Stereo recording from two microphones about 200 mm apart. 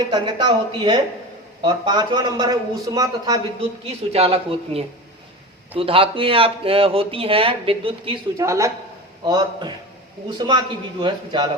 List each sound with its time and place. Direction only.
0.1 s speech: 20° right (ahead or behind)
3.8 s speech: 30° right (ahead or behind)